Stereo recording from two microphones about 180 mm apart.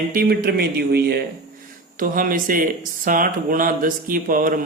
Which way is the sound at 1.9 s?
50° right (ahead or behind).